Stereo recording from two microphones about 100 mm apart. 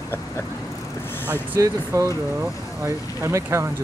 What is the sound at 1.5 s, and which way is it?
Speech, 25° right (ahead or behind).